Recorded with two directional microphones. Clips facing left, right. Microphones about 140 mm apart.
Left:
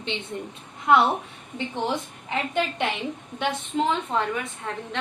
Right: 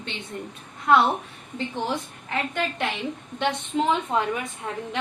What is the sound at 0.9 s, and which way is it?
Speech, 15° left (ahead or behind).